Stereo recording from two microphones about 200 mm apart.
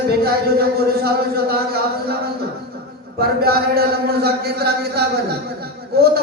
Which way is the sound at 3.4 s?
50° right (ahead or behind).